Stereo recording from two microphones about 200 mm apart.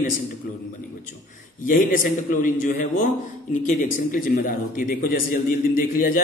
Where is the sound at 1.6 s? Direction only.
45° left (ahead or behind).